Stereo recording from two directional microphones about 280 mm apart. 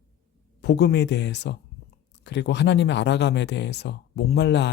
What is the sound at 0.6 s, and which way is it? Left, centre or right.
Speech, left.